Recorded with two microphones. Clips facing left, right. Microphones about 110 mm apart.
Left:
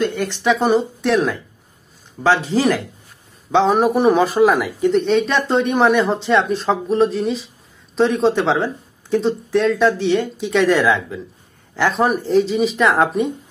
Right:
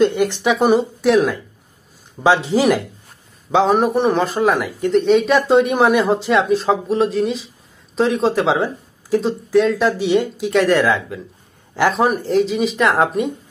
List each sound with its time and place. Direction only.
0.0 s speech: 15° right (ahead or behind)
2.2 s speech: 15° right (ahead or behind)
3.5 s speech: centre (ahead or behind)
9.9 s speech: 10° right (ahead or behind)
10.4 s speech: centre (ahead or behind)